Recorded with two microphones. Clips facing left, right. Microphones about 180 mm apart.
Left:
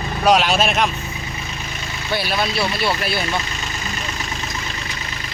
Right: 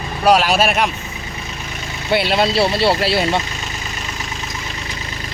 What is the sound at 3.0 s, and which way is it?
Speech, 90° right.